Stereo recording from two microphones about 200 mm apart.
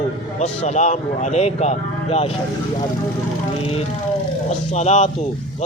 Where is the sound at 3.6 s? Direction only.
30° left (ahead or behind).